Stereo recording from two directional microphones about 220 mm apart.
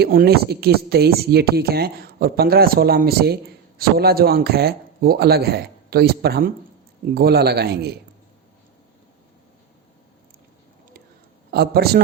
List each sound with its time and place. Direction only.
0.0 s speech: 45° right (ahead or behind)
11.5 s speech: 45° right (ahead or behind)